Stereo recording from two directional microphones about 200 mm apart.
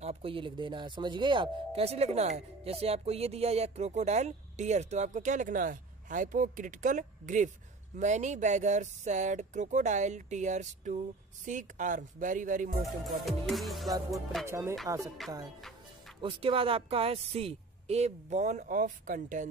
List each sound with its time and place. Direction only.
0.0 s speech: 30° right (ahead or behind)
13.0 s music: centre (ahead or behind)
14.4 s speech: 15° right (ahead or behind)
15.2 s music: centre (ahead or behind)
16.2 s speech: 25° right (ahead or behind)